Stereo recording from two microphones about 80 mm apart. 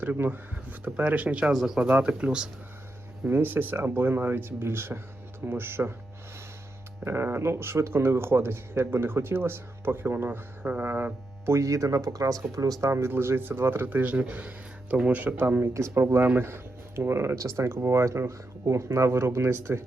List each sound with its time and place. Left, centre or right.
0.0 s speech: right
1.5 s speech: centre
1.8 s speech: centre
3.2 s speech: right
7.0 s speech: right
11.5 s speech: right